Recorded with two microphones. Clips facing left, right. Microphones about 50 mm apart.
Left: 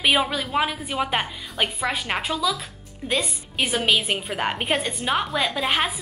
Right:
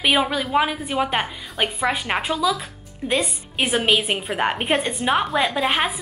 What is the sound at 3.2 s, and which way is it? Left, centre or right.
Speech, right.